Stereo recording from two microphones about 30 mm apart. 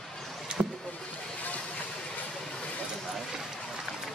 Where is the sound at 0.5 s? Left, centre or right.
Right.